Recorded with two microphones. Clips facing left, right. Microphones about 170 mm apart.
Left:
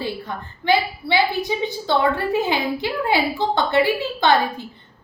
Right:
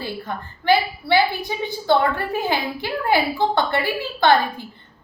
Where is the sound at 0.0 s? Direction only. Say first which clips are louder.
Left 1 dB; 20° left (ahead or behind).